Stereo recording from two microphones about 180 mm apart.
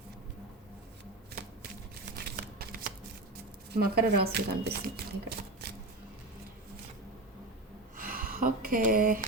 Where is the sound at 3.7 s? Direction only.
60° right (ahead or behind).